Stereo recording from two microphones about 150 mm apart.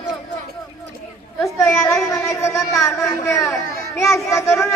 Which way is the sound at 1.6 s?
20° left (ahead or behind).